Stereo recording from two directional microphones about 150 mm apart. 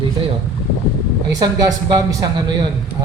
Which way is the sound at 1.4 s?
25° right (ahead or behind).